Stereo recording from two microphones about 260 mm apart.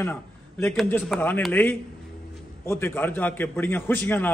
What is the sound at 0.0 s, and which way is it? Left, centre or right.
A man's voice, centre.